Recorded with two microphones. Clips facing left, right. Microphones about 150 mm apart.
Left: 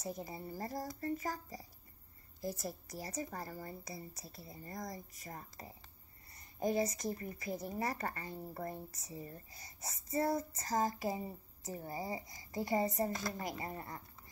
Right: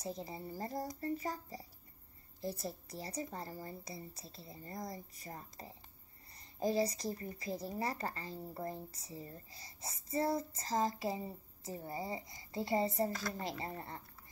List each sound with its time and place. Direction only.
0.0 s a child's voice: 25° right (ahead or behind)